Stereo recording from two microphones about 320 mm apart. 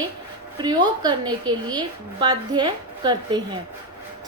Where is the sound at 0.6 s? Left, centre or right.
Centre.